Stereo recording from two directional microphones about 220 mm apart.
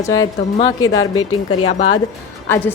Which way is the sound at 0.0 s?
15° left (ahead or behind).